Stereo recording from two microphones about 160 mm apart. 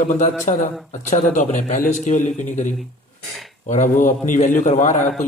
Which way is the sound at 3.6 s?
55° left (ahead or behind).